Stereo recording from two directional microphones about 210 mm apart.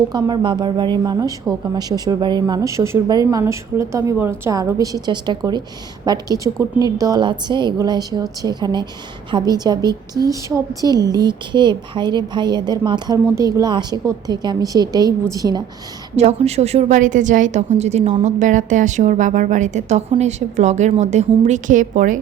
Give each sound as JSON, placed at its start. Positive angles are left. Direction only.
{"t": 0.1, "sound": "a woman's voice", "side_deg": -20}
{"t": 16.1, "sound": "a woman's voice", "side_deg": -30}